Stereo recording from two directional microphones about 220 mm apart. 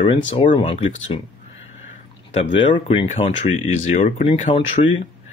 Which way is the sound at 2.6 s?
25° left (ahead or behind).